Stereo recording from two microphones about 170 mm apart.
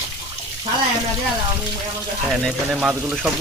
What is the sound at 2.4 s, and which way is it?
Frying, 5° right (ahead or behind).